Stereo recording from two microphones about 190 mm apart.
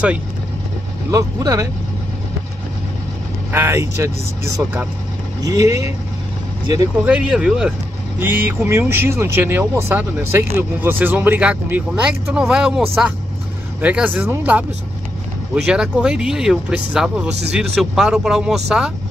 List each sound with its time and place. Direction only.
1.1 s speech: 15° right (ahead or behind)
3.5 s speech: 15° right (ahead or behind)
7.1 s speech: 5° right (ahead or behind)